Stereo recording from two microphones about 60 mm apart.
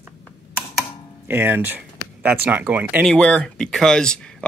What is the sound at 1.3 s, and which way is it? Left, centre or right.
Speech, right.